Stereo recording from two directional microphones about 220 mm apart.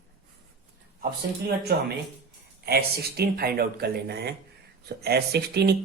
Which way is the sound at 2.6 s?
45° right (ahead or behind).